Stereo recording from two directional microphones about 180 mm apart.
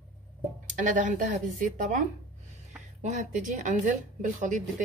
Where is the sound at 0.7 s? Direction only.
45° right (ahead or behind).